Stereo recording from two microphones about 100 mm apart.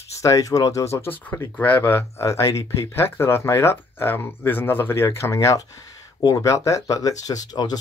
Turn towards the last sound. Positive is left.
turn(degrees=40)  # may be behind; listen again after turning